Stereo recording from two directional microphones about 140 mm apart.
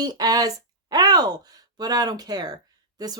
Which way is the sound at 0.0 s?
30° right (ahead or behind).